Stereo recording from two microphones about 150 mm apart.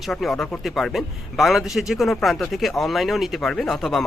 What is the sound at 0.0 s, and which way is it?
Speech, centre (ahead or behind).